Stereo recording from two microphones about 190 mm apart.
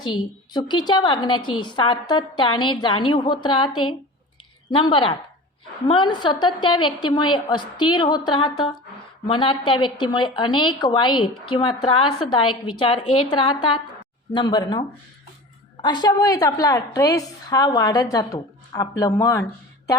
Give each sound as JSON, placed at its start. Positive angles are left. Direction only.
{"t": 0.0, "sound": "a woman's voice", "side_deg": 25}